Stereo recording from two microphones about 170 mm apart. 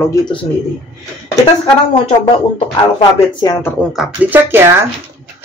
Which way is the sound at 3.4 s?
25° left (ahead or behind).